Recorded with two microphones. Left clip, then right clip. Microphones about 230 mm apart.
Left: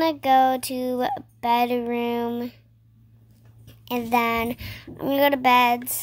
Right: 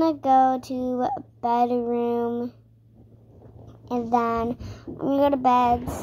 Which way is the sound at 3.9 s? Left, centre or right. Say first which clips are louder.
Left 1 dB; left.